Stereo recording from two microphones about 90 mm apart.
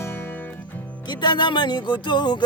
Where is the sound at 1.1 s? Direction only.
55° left (ahead or behind).